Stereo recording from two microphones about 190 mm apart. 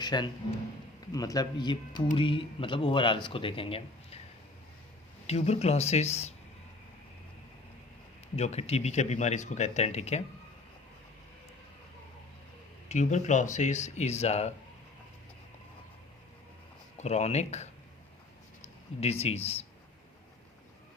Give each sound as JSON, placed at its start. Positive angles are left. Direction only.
{"t": 0.0, "sound": "speech", "side_deg": 20}
{"t": 5.2, "sound": "speech", "side_deg": 35}
{"t": 8.4, "sound": "speech", "side_deg": 35}
{"t": 12.9, "sound": "speech", "side_deg": 40}
{"t": 17.0, "sound": "speech", "side_deg": 35}